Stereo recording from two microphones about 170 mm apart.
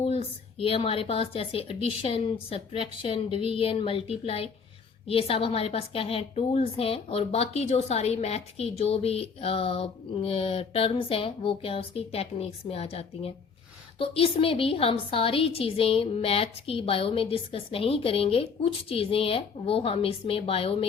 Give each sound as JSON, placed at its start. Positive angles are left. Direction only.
{"t": 0.0, "sound": "a woman's voice", "side_deg": 35}